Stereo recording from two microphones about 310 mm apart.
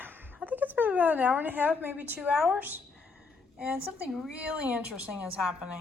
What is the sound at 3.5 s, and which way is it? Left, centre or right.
A woman's voice, centre.